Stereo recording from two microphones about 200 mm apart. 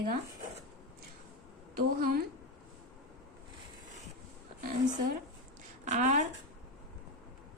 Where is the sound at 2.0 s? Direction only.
45° right (ahead or behind).